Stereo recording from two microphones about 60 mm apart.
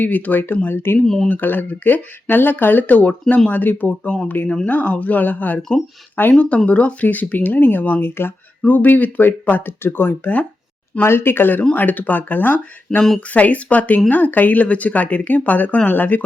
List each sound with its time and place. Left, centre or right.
0.0 s speech: left
1.0 s speech: centre
1.3 s speech: left
4.4 s speech: centre
4.7 s speech: left